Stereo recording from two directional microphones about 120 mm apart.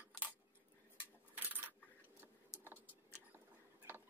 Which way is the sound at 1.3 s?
15° right (ahead or behind).